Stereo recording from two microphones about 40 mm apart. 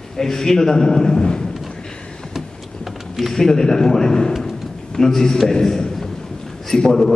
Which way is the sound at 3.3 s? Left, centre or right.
Centre.